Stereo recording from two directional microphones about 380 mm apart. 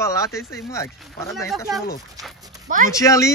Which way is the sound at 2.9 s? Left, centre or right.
Centre.